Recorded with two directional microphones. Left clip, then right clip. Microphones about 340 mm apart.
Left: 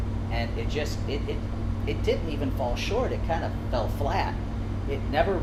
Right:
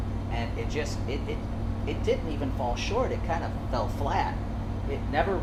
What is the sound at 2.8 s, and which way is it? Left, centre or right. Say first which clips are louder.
Speech: even; centre.